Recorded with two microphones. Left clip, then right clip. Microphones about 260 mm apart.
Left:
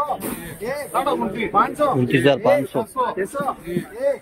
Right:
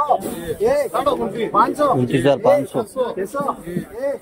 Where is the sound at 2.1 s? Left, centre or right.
Centre.